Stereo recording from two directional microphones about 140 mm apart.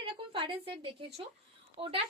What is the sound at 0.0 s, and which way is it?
A woman's voice, 40° right (ahead or behind).